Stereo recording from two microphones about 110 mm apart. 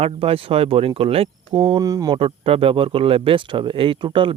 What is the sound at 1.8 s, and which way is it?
Speech, 35° right (ahead or behind).